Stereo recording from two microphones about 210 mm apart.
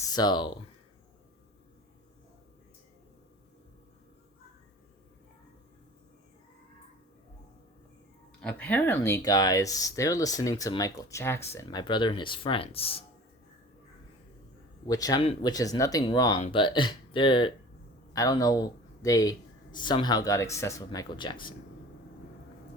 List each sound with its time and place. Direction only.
0.1 s speech: 20° left (ahead or behind)
8.4 s speech: 5° left (ahead or behind); by 13.1 s 25° left (ahead or behind)
14.8 s speech: 15° left (ahead or behind)